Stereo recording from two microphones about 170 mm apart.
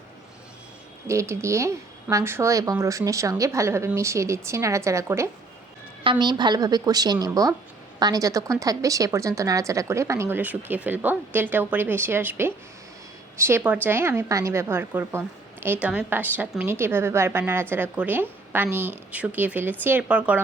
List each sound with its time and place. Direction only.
1.0 s a woman's voice: 15° right (ahead or behind)
6.0 s a woman's voice: 30° right (ahead or behind); by 20.4 s 10° right (ahead or behind)